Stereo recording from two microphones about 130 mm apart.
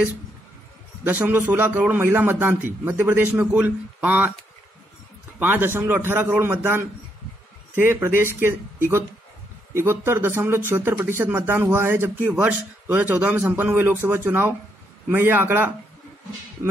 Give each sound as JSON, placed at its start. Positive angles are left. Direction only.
{"t": 1.0, "sound": "speech", "side_deg": -15}
{"t": 5.4, "sound": "speech", "side_deg": -15}